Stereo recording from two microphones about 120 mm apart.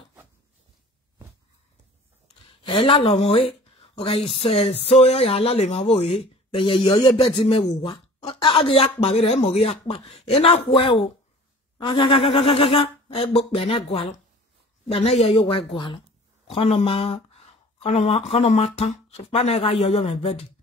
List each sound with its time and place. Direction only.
2.4 s speech: 45° left (ahead or behind)